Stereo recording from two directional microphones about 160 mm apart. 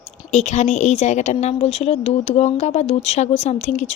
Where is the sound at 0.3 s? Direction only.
45° left (ahead or behind).